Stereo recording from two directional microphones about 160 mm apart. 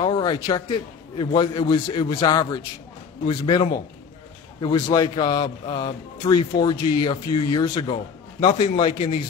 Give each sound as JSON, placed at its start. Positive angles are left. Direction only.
{"t": 0.0, "sound": "a man's voice", "side_deg": 30}